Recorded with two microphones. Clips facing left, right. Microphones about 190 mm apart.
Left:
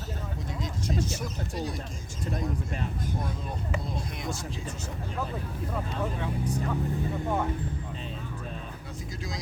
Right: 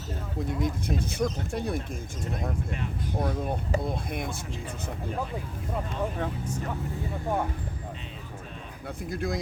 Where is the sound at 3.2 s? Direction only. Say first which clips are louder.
Right 6 dB; 55° right (ahead or behind).